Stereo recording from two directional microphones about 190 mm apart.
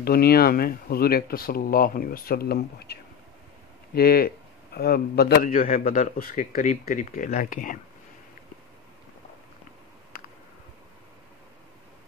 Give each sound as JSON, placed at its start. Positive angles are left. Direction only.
{"t": 0.0, "sound": "a man's voice", "side_deg": 55}